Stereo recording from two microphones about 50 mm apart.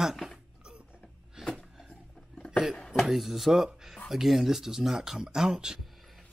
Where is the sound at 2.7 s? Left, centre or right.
Centre.